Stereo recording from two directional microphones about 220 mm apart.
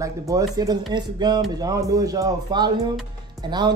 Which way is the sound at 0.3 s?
15° right (ahead or behind).